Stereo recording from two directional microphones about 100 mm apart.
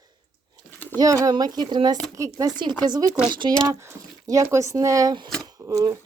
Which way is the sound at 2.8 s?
40° right (ahead or behind).